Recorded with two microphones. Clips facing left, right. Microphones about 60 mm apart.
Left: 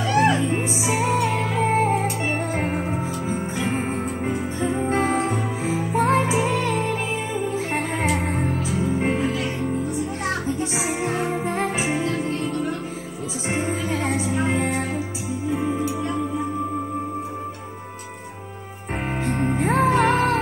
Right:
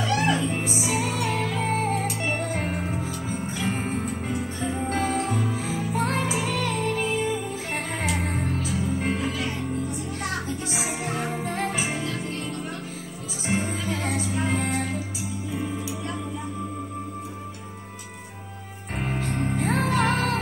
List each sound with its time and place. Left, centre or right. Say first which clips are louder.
0.1 s music: left 6 dB; centre
8.1 s music: left 4 dB; centre
8.4 s music: left 4 dB; left
10.6 s music: left 5 dB; left
13.9 s music: left 5 dB; left
19.3 s music: left 5 dB; left